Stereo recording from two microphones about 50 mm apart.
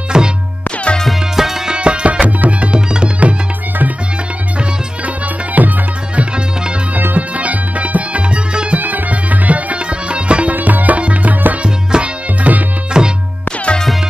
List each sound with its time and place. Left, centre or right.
0.1 s music: centre
0.9 s music: left
1.3 s music: centre
1.8 s tabla: right
4.6 s music: right
8.8 s music: right
10.5 s music: right
11.6 s tabla: right
12.9 s music: centre